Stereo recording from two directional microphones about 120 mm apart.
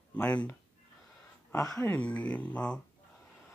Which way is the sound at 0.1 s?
10° left (ahead or behind).